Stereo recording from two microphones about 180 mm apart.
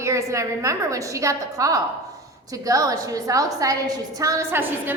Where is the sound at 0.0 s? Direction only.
15° right (ahead or behind).